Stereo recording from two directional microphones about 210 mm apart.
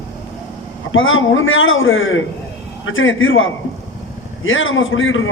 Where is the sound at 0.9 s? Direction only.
70° left (ahead or behind).